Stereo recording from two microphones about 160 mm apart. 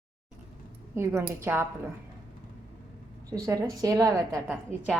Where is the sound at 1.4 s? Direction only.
15° right (ahead or behind).